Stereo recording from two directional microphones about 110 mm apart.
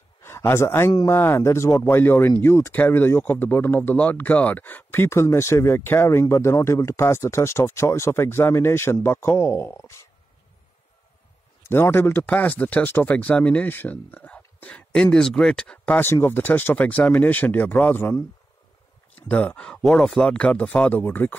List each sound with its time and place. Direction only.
0.2 s speech: 25° left (ahead or behind)
11.6 s speech: 20° left (ahead or behind)
19.1 s speech: 10° left (ahead or behind)